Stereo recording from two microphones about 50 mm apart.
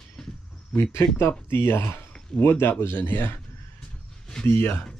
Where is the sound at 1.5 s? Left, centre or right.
Left.